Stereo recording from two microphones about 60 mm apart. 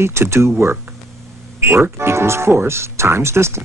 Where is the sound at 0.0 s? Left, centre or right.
Right.